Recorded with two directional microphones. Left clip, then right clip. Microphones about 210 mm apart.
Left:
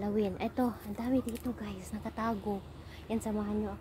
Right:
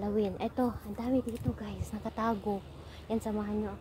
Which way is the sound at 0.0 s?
10° right (ahead or behind).